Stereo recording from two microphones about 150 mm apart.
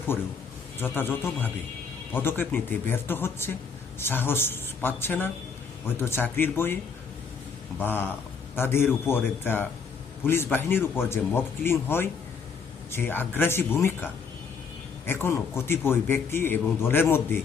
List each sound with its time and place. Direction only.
0.8 s a man's voice: 15° left (ahead or behind)
7.8 s a man's voice: 15° left (ahead or behind)